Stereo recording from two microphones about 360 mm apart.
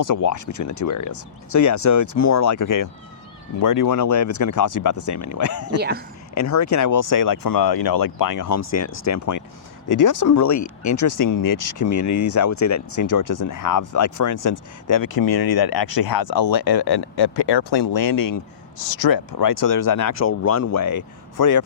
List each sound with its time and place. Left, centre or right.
0.0 s speech: left
18.9 s speech: left